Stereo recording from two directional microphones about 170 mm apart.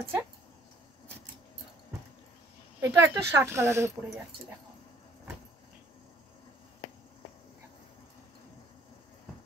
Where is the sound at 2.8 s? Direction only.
15° right (ahead or behind).